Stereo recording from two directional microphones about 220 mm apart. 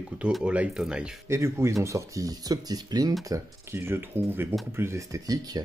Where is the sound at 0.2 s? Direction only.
5° right (ahead or behind).